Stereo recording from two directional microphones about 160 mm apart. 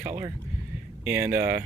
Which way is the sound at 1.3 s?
65° right (ahead or behind).